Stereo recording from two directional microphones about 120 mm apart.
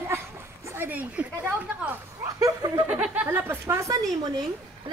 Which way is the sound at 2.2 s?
30° right (ahead or behind).